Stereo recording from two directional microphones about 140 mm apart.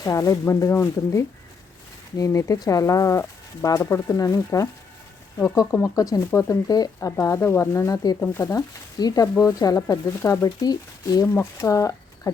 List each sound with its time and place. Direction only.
0.0 s speech: 20° left (ahead or behind)
8.2 s speech: 15° left (ahead or behind)